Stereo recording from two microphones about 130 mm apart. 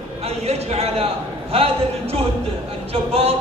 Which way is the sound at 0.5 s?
55° right (ahead or behind).